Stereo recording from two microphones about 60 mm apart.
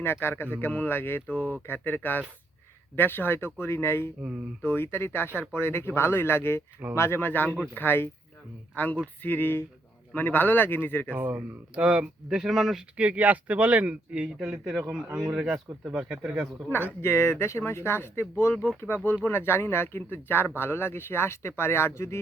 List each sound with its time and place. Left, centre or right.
0.0 s speech: left
11.1 s speech: right
12.4 s speech: centre
13.0 s speech: right
14.3 s speech: centre
16.6 s speech: left